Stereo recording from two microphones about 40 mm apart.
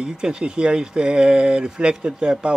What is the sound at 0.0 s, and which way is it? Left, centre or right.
Speech, right.